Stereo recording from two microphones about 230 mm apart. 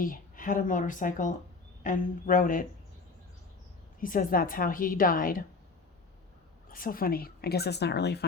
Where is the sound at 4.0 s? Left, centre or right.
Left.